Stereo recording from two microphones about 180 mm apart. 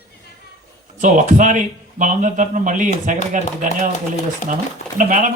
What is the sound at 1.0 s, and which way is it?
Speech, 45° right (ahead or behind).